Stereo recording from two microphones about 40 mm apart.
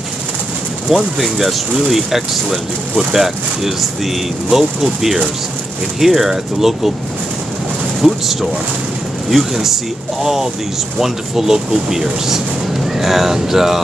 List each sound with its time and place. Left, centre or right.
0.8 s speech: centre
8.0 s speech: centre